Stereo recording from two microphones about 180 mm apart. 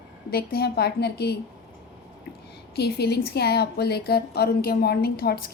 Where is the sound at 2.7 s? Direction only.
65° left (ahead or behind).